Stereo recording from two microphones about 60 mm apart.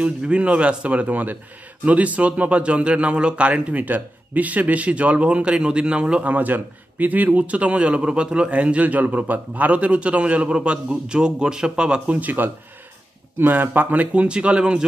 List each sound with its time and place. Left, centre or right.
0.0 s a man's voice: right
6.3 s a man's voice: right
12.2 s a man's voice: right